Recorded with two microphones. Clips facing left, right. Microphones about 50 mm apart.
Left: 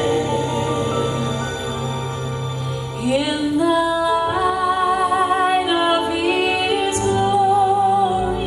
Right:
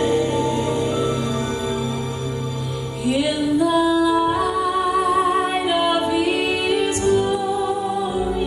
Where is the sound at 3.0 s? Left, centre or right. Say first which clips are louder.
Left 1 dB; left.